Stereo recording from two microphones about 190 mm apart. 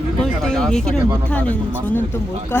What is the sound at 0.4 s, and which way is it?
Speech, 5° left (ahead or behind).